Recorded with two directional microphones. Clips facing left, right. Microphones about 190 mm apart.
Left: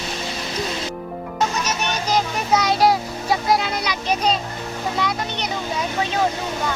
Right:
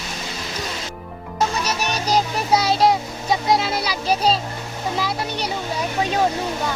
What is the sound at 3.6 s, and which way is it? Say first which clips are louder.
Speech: right 1 dB; 35° right (ahead or behind).